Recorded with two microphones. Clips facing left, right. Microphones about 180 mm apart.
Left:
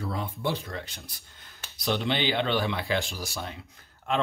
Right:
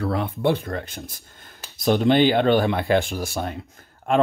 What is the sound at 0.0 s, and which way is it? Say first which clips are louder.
Speech: right 9 dB; 65° right (ahead or behind).